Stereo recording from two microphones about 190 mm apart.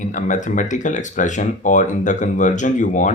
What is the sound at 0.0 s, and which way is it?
Speech, 40° left (ahead or behind).